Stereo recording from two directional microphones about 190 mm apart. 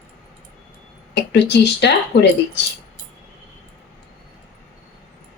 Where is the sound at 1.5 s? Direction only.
65° left (ahead or behind).